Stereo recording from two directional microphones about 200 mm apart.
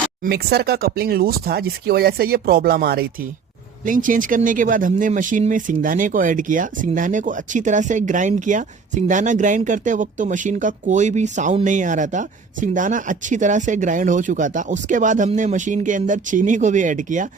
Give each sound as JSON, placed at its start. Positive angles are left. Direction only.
{"t": 0.3, "sound": "speech", "side_deg": -55}